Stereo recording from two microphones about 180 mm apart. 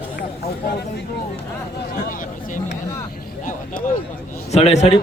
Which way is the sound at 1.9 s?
50° left (ahead or behind).